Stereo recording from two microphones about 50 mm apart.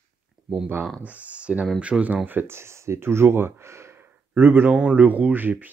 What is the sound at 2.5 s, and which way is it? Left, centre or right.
Speech, right.